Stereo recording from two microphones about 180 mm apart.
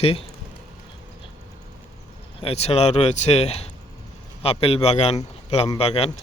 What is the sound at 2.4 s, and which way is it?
A man's voice, 35° left (ahead or behind).